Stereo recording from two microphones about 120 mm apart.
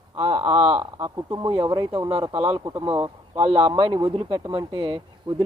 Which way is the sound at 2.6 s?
35° right (ahead or behind).